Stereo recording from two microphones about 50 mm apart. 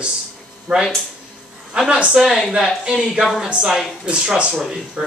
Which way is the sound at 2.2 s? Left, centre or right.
Centre.